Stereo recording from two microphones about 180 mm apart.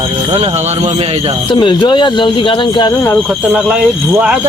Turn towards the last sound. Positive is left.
turn(degrees=-5)  # may be behind; listen again after turning